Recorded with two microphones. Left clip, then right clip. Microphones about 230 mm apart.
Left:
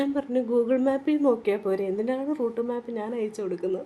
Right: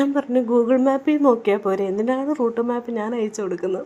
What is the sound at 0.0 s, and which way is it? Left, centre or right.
Speech, centre.